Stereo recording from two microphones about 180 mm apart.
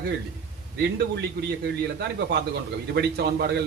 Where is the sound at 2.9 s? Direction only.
65° right (ahead or behind).